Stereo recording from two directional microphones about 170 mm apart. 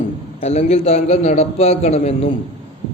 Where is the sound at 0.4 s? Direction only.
40° left (ahead or behind).